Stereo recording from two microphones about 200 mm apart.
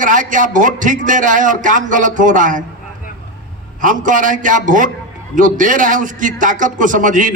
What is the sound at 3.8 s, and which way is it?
A man's voice, 40° right (ahead or behind).